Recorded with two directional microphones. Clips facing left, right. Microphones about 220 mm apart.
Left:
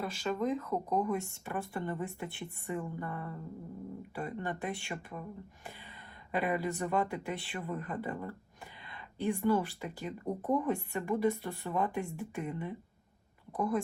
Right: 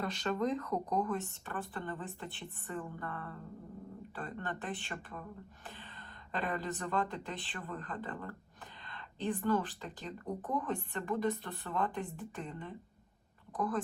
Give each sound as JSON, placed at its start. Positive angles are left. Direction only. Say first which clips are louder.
{"t": 0.0, "sound": "speech", "louder": "left 1 dB", "side_deg": 5}
{"t": 6.3, "sound": "speech", "louder": "left 5 dB", "side_deg": 10}